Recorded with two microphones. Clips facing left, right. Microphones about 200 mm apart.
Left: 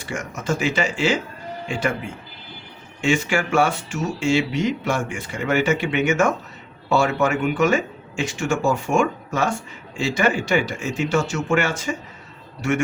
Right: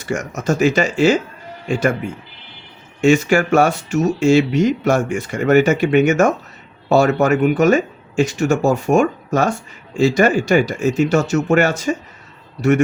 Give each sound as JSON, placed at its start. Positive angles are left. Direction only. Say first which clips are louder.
{"t": 0.0, "sound": "speech", "louder": "right 7 dB", "side_deg": -40}
{"t": 3.0, "sound": "speech", "louder": "right 7 dB", "side_deg": -40}